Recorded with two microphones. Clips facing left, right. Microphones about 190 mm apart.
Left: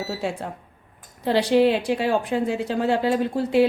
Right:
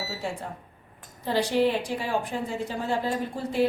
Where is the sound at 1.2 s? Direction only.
75° left (ahead or behind).